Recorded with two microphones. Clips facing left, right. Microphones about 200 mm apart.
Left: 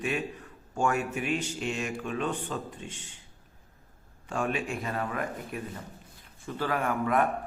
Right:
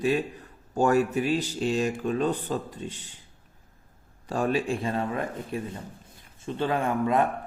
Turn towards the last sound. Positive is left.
turn(degrees=-25)  # may be behind; listen again after turning